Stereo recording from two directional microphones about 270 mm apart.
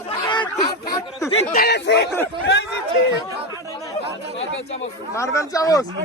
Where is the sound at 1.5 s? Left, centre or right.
Left.